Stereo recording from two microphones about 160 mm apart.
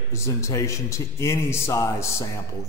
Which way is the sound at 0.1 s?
20° left (ahead or behind).